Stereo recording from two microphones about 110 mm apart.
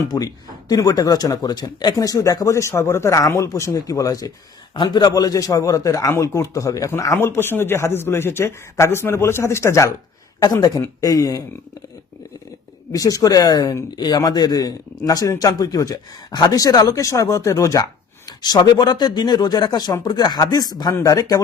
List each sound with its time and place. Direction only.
0.1 s a man's voice: 35° left (ahead or behind)
12.9 s speech: 30° left (ahead or behind)